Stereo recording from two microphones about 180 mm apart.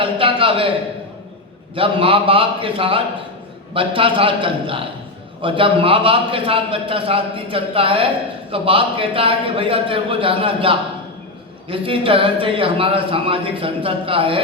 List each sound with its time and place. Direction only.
0.0 s a man's voice: 30° right (ahead or behind)
1.7 s a man's voice: 30° right (ahead or behind)